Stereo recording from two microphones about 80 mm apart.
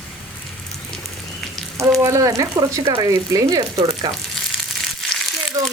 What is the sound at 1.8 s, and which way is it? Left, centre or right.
Speech, right.